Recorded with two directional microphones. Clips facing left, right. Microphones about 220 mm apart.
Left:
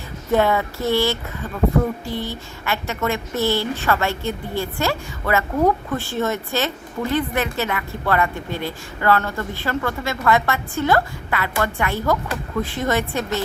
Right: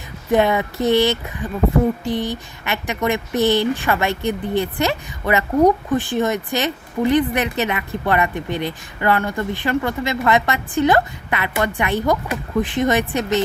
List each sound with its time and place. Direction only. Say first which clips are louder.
0.3 s a woman's voice: right 2 dB; 15° right (ahead or behind)